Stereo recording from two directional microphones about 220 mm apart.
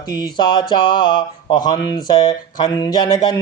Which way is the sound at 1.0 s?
20° left (ahead or behind).